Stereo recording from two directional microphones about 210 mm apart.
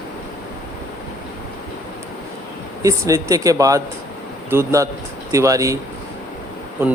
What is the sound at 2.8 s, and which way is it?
Speech, 15° right (ahead or behind).